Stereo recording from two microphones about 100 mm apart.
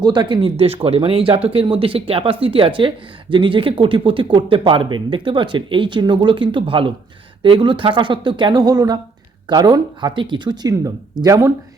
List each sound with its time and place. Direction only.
0.0 s speech: 50° right (ahead or behind)
0.5 s speech: 85° right; by 11.3 s 40° right (ahead or behind)